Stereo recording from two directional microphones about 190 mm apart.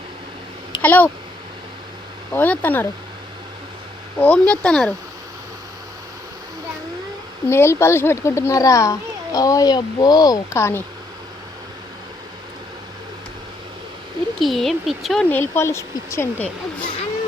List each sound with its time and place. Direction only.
0.8 s a child's voice: 10° left (ahead or behind)
2.3 s a child's voice: 10° left (ahead or behind)
4.2 s speech: 5° left (ahead or behind)
7.4 s a child's voice: 15° left (ahead or behind)
14.3 s a child's voice: centre (ahead or behind)